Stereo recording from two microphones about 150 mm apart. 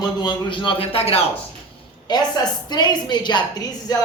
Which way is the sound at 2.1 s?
30° left (ahead or behind).